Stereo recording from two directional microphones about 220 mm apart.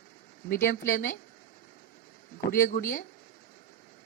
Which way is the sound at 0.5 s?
35° left (ahead or behind).